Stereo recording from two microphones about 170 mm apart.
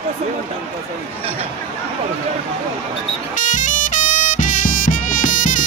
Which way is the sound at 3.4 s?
50° left (ahead or behind).